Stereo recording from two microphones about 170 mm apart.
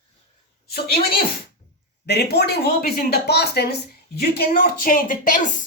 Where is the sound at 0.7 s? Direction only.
65° left (ahead or behind).